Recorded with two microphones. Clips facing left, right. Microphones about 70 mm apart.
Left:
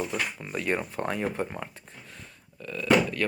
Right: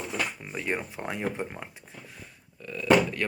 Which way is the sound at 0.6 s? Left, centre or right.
Centre.